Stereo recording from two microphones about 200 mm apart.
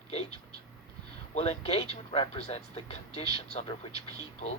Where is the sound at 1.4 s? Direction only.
30° left (ahead or behind).